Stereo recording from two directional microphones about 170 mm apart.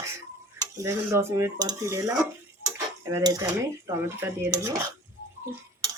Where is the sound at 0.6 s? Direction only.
15° right (ahead or behind).